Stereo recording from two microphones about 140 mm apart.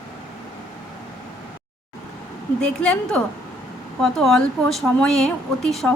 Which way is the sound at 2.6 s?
5° left (ahead or behind).